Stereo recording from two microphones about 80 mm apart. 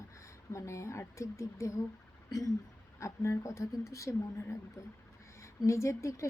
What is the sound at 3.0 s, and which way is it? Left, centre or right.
A woman's voice, left.